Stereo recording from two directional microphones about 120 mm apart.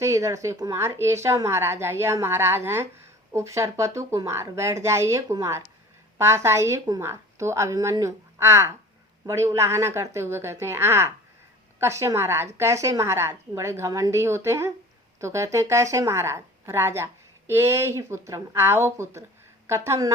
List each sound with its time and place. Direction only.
0.0 s a woman's voice: 25° right (ahead or behind)